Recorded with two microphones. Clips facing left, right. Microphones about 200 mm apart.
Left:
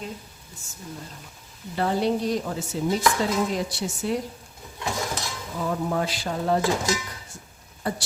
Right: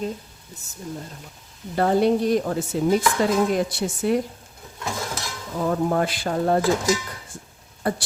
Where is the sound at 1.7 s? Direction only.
50° right (ahead or behind).